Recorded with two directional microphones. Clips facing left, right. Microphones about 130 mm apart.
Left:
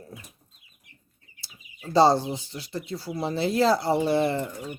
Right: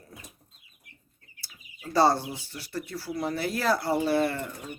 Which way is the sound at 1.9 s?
20° left (ahead or behind).